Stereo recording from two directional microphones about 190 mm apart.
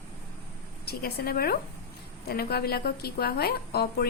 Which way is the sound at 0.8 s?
55° left (ahead or behind).